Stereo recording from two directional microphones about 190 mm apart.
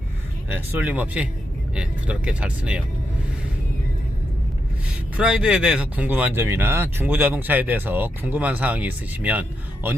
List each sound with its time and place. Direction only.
0.4 s speech: 10° right (ahead or behind)
5.1 s speech: 5° right (ahead or behind)